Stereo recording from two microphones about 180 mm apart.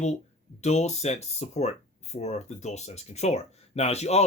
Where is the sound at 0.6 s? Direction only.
40° left (ahead or behind).